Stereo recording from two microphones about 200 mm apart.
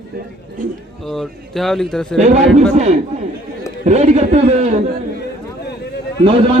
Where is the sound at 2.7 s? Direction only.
35° right (ahead or behind).